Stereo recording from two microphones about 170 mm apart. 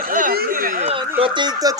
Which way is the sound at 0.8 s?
35° right (ahead or behind).